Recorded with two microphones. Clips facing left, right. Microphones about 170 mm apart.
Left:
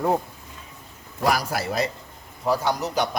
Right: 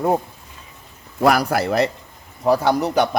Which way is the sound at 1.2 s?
60° right (ahead or behind).